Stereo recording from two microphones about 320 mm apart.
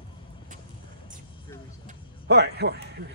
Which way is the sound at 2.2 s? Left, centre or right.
Right.